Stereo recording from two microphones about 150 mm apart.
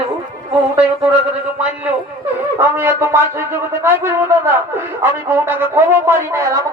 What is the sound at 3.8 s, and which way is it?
A man's voice, 15° right (ahead or behind).